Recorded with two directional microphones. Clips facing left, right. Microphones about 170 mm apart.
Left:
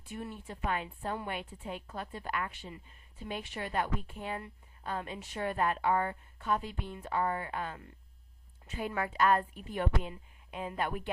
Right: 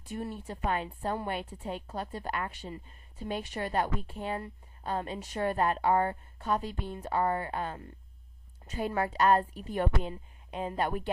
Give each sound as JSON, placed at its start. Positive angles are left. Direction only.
{"t": 0.0, "sound": "a woman's voice", "side_deg": -40}